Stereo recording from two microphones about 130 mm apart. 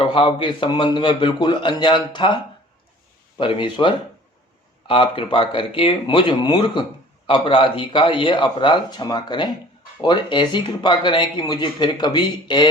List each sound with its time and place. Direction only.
0.0 s speech: 40° left (ahead or behind)